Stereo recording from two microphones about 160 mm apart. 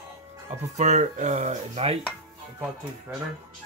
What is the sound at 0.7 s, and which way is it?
Speech, 45° right (ahead or behind).